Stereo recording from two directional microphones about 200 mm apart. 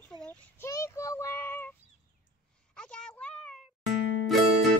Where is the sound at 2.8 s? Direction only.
5° left (ahead or behind).